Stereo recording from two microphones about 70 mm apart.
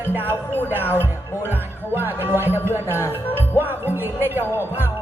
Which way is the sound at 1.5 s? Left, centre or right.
Right.